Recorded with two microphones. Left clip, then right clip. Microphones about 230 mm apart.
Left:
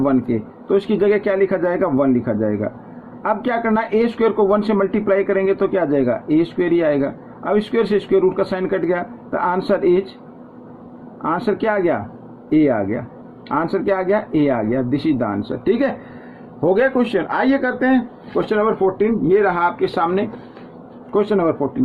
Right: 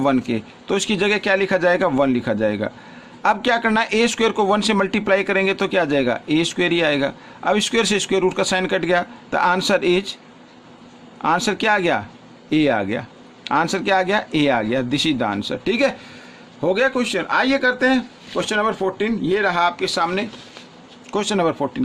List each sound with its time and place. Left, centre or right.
0.7 s speech: right
11.2 s speech: right
16.6 s speech: right